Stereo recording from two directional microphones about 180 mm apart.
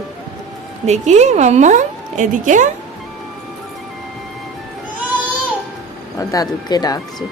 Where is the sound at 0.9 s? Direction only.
40° right (ahead or behind).